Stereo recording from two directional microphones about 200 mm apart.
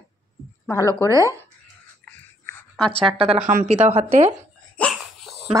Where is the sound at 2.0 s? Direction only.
10° left (ahead or behind).